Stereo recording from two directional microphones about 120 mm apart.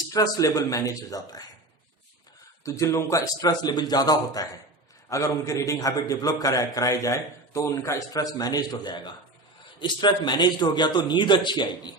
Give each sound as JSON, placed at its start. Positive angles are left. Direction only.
{"t": 0.1, "sound": "a man's voice", "side_deg": 30}
{"t": 2.6, "sound": "a man's voice", "side_deg": 25}